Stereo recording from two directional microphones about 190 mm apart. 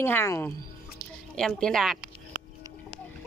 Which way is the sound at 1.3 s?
5° left (ahead or behind).